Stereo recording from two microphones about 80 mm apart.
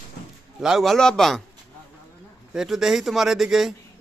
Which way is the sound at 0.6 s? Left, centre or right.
Centre.